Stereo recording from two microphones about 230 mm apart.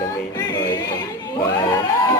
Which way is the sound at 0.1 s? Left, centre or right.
Centre.